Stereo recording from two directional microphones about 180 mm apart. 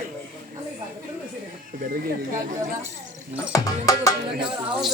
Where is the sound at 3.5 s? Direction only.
20° left (ahead or behind).